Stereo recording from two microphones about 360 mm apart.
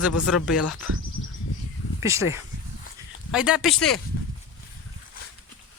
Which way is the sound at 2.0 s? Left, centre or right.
Centre.